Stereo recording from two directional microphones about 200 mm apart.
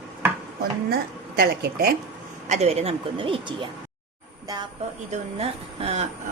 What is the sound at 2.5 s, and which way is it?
A woman's voice, 30° right (ahead or behind).